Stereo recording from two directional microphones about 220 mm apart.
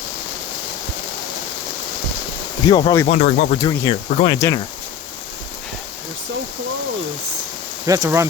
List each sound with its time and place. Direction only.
2.6 s speech: 20° left (ahead or behind)
3.1 s speech: 35° left (ahead or behind)
4.4 s speech: 15° left (ahead or behind)
7.9 s speech: 15° right (ahead or behind)